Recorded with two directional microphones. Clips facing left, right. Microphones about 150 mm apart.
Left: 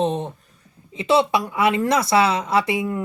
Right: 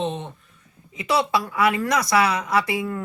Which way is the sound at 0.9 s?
25° left (ahead or behind).